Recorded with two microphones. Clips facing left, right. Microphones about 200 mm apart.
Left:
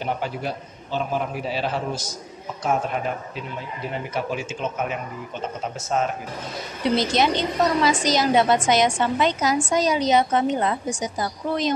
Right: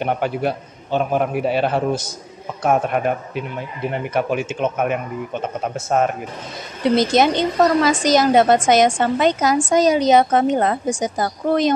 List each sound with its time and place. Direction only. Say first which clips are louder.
0.0 s a man's voice: right 6 dB; 60° right (ahead or behind)